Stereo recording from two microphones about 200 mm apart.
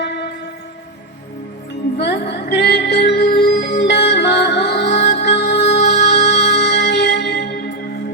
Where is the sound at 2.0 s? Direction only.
55° left (ahead or behind).